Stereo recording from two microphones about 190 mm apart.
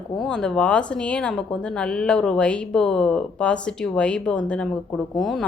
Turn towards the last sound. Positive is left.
turn(degrees=0)  # may be behind; listen again after turning